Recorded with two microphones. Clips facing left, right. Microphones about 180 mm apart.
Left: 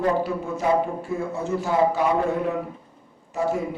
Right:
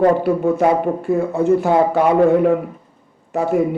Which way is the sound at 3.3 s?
60° right (ahead or behind).